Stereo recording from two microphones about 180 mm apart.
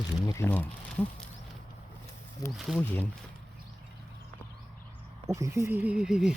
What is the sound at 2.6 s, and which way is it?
Speech, centre (ahead or behind).